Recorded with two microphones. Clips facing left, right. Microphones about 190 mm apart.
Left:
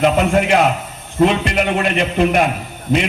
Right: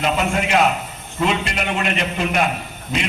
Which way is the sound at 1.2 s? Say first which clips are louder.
Left 7 dB; 55° left (ahead or behind).